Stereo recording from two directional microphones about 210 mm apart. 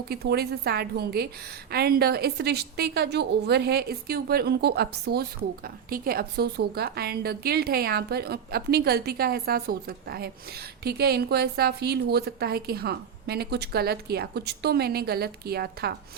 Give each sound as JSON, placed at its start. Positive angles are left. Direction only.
{"t": 0.1, "sound": "a woman's voice", "side_deg": -50}